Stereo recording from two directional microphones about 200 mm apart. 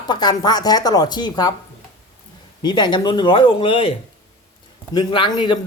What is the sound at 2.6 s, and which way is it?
A man's voice, 20° left (ahead or behind).